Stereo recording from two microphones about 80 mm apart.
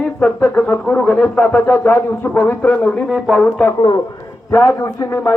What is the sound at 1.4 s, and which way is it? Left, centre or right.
Speech, left.